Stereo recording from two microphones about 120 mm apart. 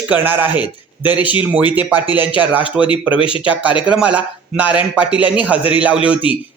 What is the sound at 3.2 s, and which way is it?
Speech, 45° left (ahead or behind).